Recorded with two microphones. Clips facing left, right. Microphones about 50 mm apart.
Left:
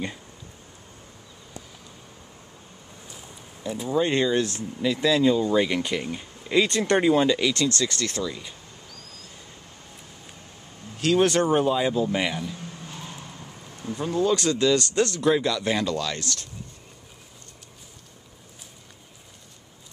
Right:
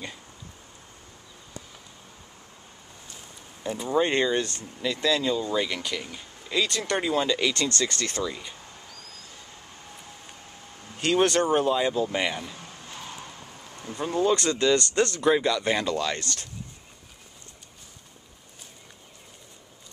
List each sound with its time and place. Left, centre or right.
3.6 s speech: centre
7.3 s speech: centre
7.6 s speech: centre
11.0 s speech: centre
11.2 s speech: centre
13.9 s speech: centre